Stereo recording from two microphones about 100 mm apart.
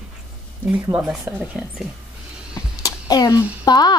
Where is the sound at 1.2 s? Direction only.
15° right (ahead or behind).